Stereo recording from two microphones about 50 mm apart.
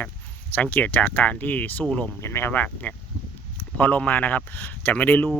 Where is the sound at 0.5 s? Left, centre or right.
Left.